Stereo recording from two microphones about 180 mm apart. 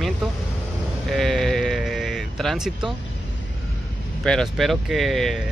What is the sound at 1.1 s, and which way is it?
Bleat, centre (ahead or behind).